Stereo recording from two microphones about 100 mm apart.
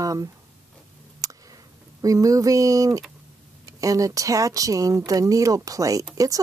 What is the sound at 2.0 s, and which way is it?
Speech, 35° right (ahead or behind).